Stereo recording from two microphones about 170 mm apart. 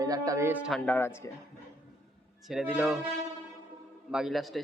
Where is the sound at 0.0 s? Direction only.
20° right (ahead or behind).